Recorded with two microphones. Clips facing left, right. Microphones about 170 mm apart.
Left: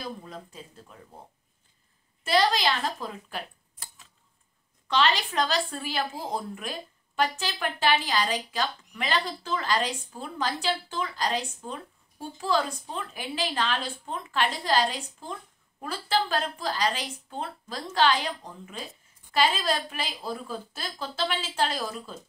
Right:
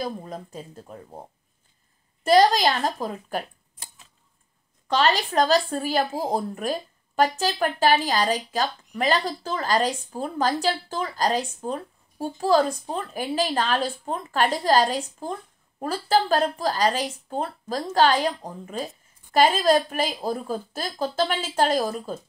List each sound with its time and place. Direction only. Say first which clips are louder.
0.0 s speech: right 7 dB; 45° right (ahead or behind)
2.2 s speech: right 7 dB; 45° right (ahead or behind)
4.8 s speech: right 3 dB; 45° right (ahead or behind)